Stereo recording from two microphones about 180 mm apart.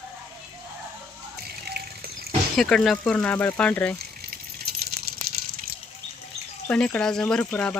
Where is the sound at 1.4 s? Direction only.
60° right (ahead or behind).